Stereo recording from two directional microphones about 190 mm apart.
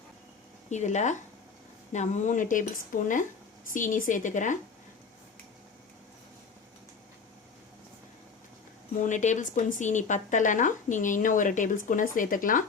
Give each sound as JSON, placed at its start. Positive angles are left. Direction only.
{"t": 0.7, "sound": "speech", "side_deg": 40}
{"t": 9.0, "sound": "speech", "side_deg": 40}